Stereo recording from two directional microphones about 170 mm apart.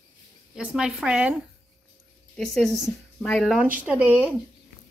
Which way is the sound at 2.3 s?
5° left (ahead or behind).